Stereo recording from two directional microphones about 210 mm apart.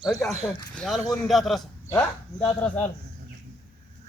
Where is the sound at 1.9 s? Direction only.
15° left (ahead or behind).